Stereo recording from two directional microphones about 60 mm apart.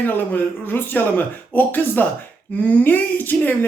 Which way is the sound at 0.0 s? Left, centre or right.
Left.